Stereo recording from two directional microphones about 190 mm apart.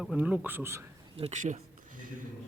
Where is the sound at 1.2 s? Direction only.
35° right (ahead or behind).